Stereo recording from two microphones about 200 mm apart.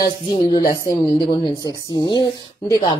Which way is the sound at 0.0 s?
25° left (ahead or behind).